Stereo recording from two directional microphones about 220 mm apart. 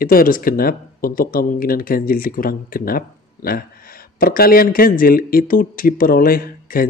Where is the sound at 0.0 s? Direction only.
40° left (ahead or behind).